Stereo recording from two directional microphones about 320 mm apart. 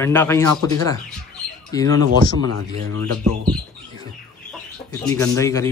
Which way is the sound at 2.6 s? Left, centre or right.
Right.